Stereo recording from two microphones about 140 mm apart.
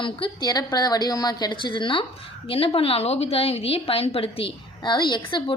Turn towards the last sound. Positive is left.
turn(degrees=30)  # may be behind; listen again after turning